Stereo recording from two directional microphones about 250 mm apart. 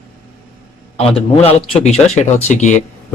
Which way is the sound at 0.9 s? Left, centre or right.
Left.